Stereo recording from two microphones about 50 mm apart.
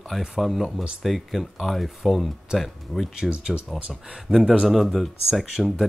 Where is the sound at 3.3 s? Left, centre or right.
Right.